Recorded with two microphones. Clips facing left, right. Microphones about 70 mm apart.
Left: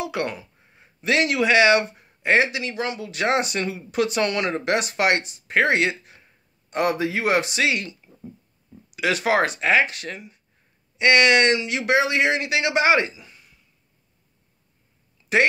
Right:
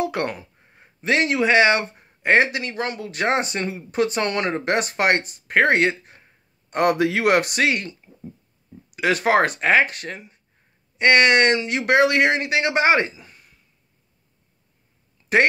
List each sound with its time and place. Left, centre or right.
0.0 s speech: right
6.7 s speech: right
15.2 s a sound: right